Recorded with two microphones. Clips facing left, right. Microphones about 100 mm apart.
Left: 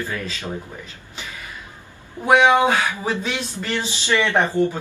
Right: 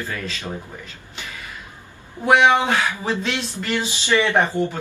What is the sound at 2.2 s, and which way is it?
Speech, 10° left (ahead or behind).